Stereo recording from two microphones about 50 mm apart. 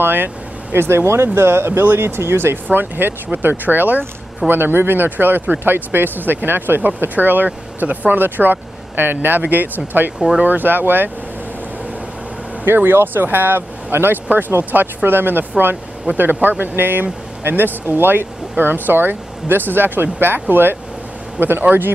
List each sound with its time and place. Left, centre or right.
0.0 s speech: right
0.7 s speech: right
12.6 s speech: right